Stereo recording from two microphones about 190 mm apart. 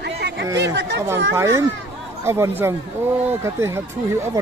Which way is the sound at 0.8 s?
65° right (ahead or behind).